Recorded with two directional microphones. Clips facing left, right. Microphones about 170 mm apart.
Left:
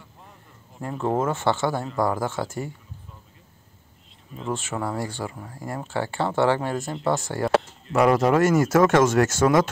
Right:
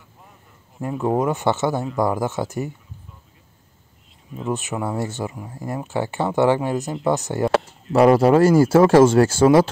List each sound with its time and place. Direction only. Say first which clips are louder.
0.7 s speech: right 3 dB; 15° right (ahead or behind)
4.5 s speech: right 3 dB; 20° right (ahead or behind)
7.9 s speech: right 5 dB; 30° right (ahead or behind)